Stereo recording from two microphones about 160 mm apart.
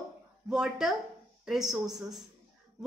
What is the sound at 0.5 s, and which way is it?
Speech, 5° right (ahead or behind).